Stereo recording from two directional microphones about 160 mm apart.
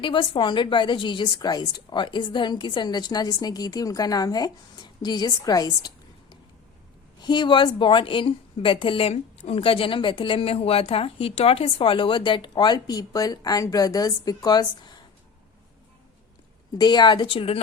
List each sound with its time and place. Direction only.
0.0 s a woman's voice: 30° left (ahead or behind)
7.2 s a woman's voice: 25° left (ahead or behind)
16.7 s a woman's voice: 25° left (ahead or behind)